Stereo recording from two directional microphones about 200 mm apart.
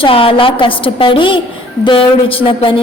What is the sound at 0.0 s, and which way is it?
A woman's voice, 25° left (ahead or behind).